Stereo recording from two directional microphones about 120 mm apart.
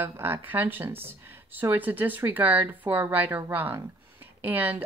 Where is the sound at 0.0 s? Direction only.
15° right (ahead or behind).